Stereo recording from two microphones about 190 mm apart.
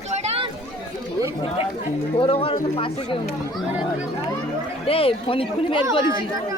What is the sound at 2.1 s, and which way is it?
Speech, 30° left (ahead or behind).